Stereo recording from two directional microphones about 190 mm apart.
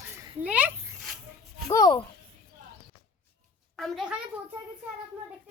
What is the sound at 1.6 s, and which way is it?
Speech, 20° left (ahead or behind).